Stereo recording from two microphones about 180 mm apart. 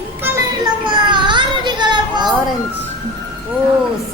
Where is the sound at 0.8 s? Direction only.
25° right (ahead or behind).